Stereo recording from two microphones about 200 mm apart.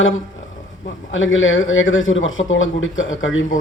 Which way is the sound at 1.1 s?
75° left (ahead or behind).